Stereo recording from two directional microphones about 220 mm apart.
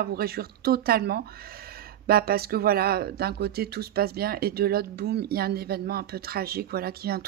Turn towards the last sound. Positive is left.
turn(degrees=-45)  # may be behind; listen again after turning